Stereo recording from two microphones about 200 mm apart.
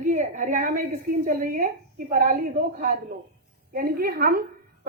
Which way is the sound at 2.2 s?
45° right (ahead or behind).